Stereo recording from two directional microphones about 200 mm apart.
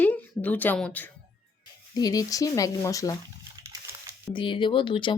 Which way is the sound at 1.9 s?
20° left (ahead or behind).